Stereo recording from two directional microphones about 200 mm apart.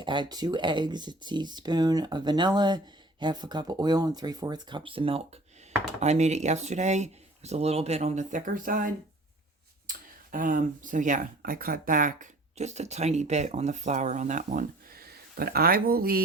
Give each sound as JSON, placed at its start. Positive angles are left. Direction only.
{"t": 0.0, "sound": "speech", "side_deg": -25}
{"t": 10.3, "sound": "speech", "side_deg": -40}